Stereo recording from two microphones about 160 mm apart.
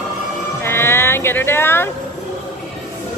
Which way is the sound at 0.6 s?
15° left (ahead or behind).